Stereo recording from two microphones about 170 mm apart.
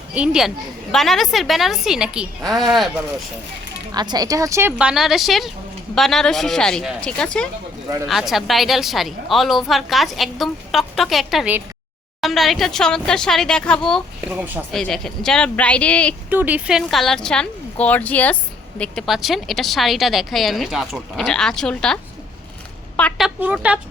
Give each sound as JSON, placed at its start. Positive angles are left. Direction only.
{"t": 0.1, "sound": "a woman's voice", "side_deg": -5}
{"t": 3.9, "sound": "speech", "side_deg": -25}
{"t": 4.8, "sound": "a woman's voice", "side_deg": -5}
{"t": 14.3, "sound": "speech", "side_deg": -10}
{"t": 14.7, "sound": "a woman's voice", "side_deg": 5}
{"t": 16.3, "sound": "a woman's voice", "side_deg": -10}
{"t": 23.0, "sound": "a woman's voice", "side_deg": 5}